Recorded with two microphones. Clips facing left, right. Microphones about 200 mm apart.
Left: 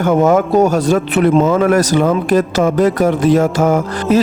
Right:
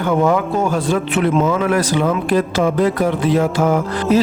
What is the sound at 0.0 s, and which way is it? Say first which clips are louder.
Speech: left 4 dB; 45° left (ahead or behind).